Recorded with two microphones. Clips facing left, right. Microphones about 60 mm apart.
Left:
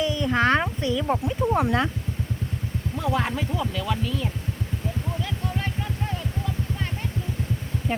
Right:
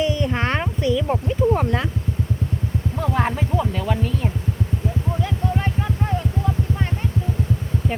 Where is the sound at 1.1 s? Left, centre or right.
Centre.